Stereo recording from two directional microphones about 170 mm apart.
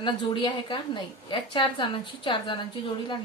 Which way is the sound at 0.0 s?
30° left (ahead or behind).